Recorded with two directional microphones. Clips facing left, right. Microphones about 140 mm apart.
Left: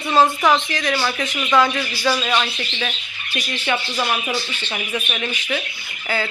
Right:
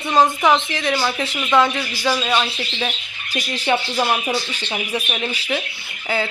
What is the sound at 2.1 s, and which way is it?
Speech, 5° right (ahead or behind).